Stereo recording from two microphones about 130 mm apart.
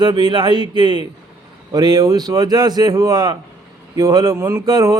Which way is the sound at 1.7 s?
30° right (ahead or behind).